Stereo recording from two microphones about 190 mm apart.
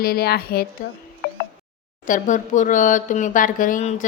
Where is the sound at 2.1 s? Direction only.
45° left (ahead or behind).